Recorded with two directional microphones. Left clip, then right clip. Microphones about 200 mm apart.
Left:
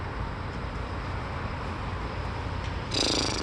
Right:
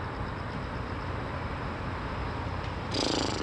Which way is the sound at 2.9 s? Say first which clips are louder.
Left 3 dB; 20° left (ahead or behind).